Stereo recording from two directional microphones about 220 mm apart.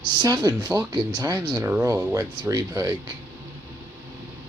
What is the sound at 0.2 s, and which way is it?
Speech, 15° right (ahead or behind).